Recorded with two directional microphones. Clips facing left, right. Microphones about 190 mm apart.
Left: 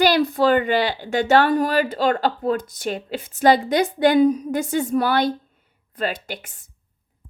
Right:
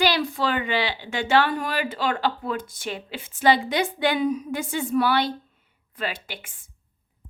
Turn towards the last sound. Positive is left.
turn(degrees=40)  # may be behind; listen again after turning